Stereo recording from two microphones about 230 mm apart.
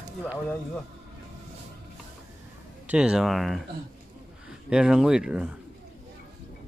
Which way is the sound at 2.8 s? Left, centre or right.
Centre.